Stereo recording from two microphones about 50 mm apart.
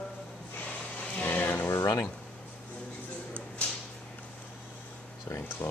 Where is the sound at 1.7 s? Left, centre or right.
Left.